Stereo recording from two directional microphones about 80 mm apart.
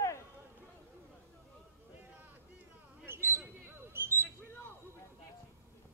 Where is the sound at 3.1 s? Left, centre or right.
Right.